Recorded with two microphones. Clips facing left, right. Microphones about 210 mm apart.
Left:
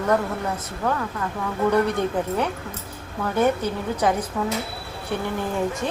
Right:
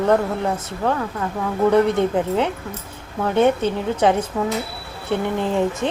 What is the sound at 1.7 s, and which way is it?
A woman's voice, 20° right (ahead or behind).